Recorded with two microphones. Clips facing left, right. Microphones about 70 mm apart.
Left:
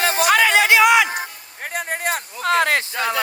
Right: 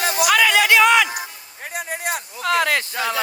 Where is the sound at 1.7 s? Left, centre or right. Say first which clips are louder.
Left 2 dB; left.